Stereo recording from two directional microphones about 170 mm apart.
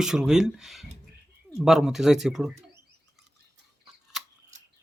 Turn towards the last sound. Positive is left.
turn(degrees=0)  # may be behind; listen again after turning